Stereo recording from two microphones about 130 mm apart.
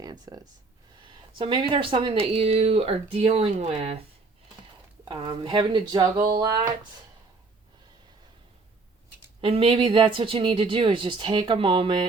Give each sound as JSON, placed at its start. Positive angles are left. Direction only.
{"t": 0.0, "sound": "a sound", "side_deg": -30}
{"t": 1.0, "sound": "speech", "side_deg": -40}
{"t": 5.0, "sound": "speech", "side_deg": -35}
{"t": 9.4, "sound": "speech", "side_deg": -45}